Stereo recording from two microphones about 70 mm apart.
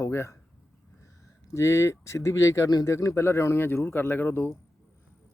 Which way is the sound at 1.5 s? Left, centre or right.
Left.